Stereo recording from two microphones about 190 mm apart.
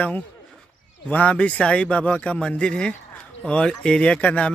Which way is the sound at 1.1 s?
5° left (ahead or behind).